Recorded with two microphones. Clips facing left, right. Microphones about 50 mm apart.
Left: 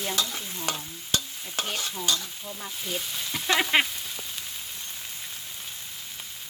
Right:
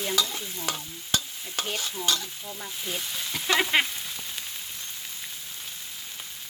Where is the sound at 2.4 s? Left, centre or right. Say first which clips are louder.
Even; centre.